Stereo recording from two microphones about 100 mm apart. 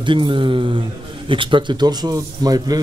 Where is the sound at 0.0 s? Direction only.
55° right (ahead or behind).